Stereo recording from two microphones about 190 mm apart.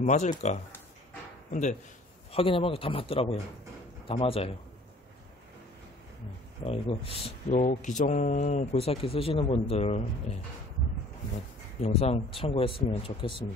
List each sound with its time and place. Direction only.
0.0 s speech: 35° left (ahead or behind)
2.3 s speech: 30° left (ahead or behind)
6.6 s speech: 30° left (ahead or behind)
11.8 s speech: 35° left (ahead or behind)